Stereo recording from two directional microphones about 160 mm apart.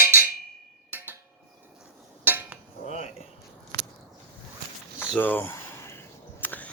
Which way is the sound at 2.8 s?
45° left (ahead or behind).